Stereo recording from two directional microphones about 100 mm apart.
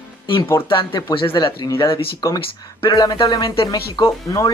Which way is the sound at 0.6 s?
55° left (ahead or behind).